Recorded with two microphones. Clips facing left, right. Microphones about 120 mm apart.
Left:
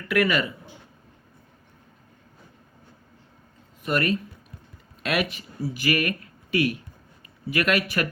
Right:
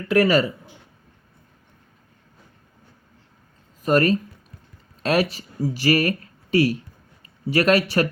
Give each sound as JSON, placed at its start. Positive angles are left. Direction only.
{"t": 0.1, "sound": "speech", "side_deg": -35}
{"t": 3.8, "sound": "speech", "side_deg": -35}